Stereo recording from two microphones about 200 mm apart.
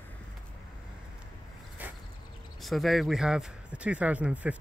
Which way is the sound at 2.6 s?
Centre (ahead or behind).